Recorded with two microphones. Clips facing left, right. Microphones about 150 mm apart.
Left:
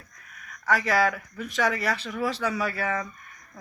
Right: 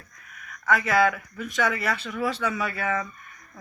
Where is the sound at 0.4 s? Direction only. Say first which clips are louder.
Right 1 dB; 35° left (ahead or behind).